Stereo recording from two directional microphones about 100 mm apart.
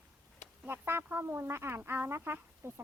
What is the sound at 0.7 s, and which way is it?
Speech, 20° right (ahead or behind).